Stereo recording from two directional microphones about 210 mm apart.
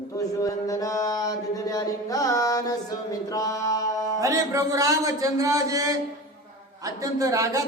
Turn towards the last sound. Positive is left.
turn(degrees=-15)  # may be behind; listen again after turning